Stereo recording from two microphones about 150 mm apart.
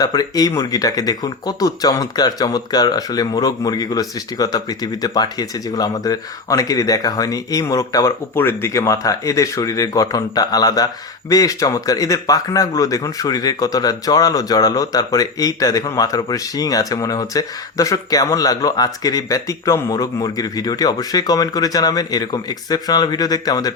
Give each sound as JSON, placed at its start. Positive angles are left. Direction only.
{"t": 0.0, "sound": "speech", "side_deg": 25}